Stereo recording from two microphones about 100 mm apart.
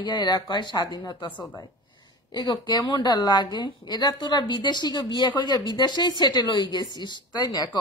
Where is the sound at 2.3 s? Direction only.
45° left (ahead or behind).